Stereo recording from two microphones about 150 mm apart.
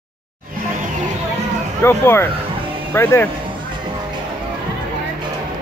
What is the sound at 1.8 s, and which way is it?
Speech, 15° left (ahead or behind).